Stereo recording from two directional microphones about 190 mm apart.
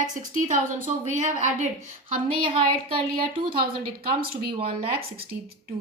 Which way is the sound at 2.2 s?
30° right (ahead or behind).